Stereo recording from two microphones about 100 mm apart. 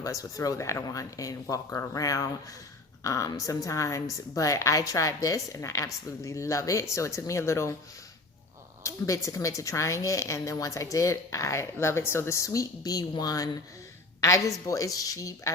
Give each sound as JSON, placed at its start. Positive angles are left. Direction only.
{"t": 0.0, "sound": "a woman's voice", "side_deg": 35}
{"t": 8.8, "sound": "a woman's voice", "side_deg": 30}